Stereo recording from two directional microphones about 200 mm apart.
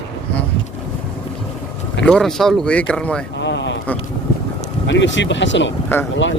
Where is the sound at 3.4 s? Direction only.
60° left (ahead or behind).